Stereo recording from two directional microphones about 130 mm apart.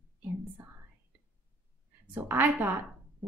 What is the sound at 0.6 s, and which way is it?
Speech, 20° right (ahead or behind).